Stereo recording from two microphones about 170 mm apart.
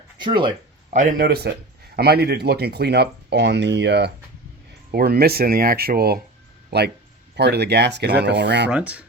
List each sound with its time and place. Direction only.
0.2 s speech: 30° right (ahead or behind)
0.9 s speech: 50° right (ahead or behind); by 4.1 s 85° right
4.9 s speech: 65° right (ahead or behind)
6.7 s speech: 75° right (ahead or behind); by 8.7 s 90° right
8.7 s speech: 10° right (ahead or behind)